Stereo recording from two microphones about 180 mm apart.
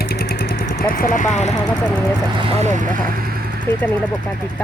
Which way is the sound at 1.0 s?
45° left (ahead or behind).